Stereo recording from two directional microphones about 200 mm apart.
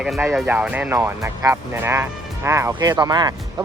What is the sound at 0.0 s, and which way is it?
Speech, 5° right (ahead or behind).